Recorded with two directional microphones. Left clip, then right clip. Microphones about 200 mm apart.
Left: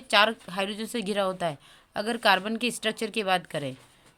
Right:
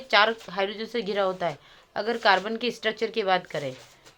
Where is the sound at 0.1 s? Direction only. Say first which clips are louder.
Right 1 dB; 30° left (ahead or behind).